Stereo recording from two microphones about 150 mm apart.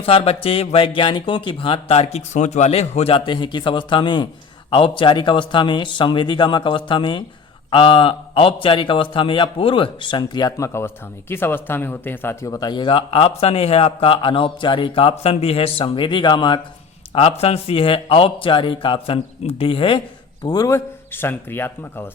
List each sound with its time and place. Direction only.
0.0 s a man's voice: 40° left (ahead or behind)
20.5 s speech: 20° left (ahead or behind)